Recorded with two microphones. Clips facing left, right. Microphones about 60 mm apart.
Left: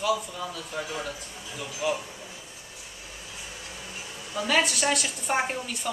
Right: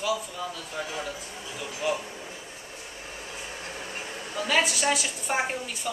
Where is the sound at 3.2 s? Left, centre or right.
Right.